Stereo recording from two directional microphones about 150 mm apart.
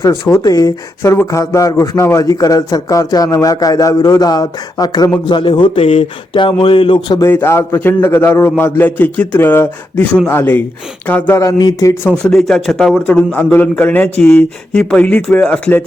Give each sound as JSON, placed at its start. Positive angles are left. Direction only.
{"t": 0.3, "sound": "speech", "side_deg": 25}
{"t": 7.3, "sound": "a man's voice", "side_deg": 15}
{"t": 11.4, "sound": "speech", "side_deg": 25}
{"t": 12.2, "sound": "a man's voice", "side_deg": 0}